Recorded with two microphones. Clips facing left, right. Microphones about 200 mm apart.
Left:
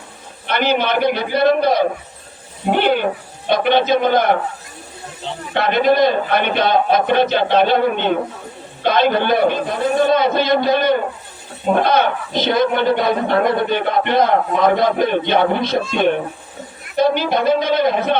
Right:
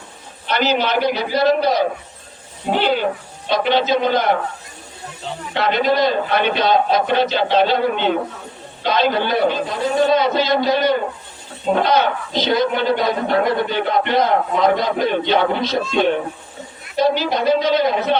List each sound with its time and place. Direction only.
0.4 s a man's voice: 55° left (ahead or behind)
5.5 s a man's voice: 55° left (ahead or behind)